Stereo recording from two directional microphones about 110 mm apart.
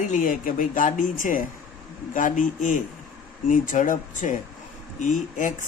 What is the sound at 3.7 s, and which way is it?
Speech, 90° left.